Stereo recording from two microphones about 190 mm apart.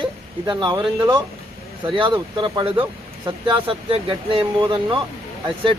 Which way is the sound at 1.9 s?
25° right (ahead or behind).